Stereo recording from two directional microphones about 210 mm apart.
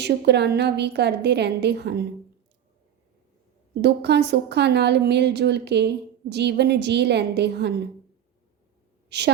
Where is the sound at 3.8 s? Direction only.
55° right (ahead or behind).